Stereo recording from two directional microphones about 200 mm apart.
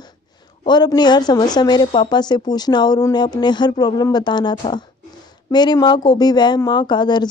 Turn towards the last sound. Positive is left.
turn(degrees=20)  # may be behind; listen again after turning